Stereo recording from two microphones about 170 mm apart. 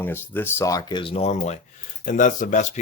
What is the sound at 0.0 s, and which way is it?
Speech, 15° left (ahead or behind).